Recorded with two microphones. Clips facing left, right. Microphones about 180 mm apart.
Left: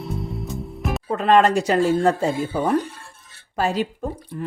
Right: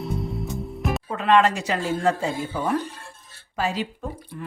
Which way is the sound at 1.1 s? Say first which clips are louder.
Left 3 dB; 40° left (ahead or behind).